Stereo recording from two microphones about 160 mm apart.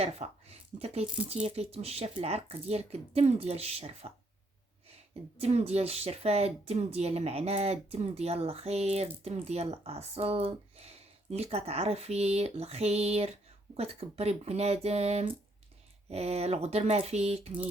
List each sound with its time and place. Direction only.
0.0 s speech: 40° right (ahead or behind)
5.4 s speech: 40° right (ahead or behind)